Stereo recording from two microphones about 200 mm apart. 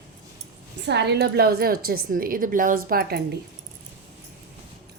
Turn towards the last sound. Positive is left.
turn(degrees=-50)  # may be behind; listen again after turning